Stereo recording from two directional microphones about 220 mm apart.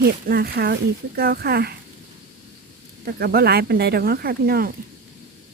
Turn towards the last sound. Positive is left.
turn(degrees=-45)  # may be behind; listen again after turning